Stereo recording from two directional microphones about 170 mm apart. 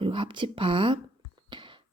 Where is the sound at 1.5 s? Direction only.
30° right (ahead or behind).